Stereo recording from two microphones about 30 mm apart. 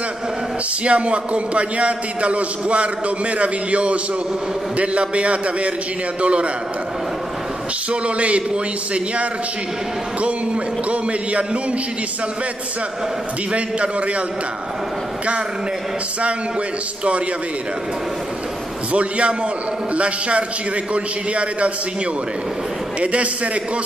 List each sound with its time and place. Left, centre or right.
0.8 s a man's voice: right
7.9 s a man's voice: right
13.5 s a man's voice: right
18.9 s a man's voice: right
22.9 s a man's voice: right